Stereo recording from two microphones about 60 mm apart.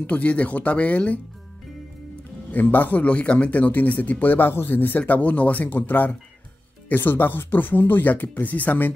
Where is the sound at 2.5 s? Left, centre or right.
Left.